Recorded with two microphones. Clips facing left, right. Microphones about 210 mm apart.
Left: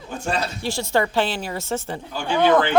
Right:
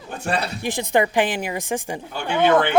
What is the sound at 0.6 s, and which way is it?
A man's voice, 15° right (ahead or behind).